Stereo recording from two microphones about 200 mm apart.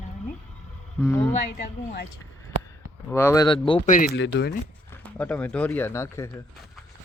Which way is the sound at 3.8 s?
40° left (ahead or behind).